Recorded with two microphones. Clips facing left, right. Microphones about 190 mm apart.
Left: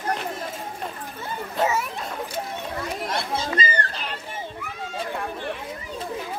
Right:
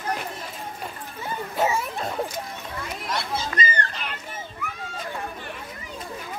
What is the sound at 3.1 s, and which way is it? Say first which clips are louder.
Children playing: even; 30° left (ahead or behind).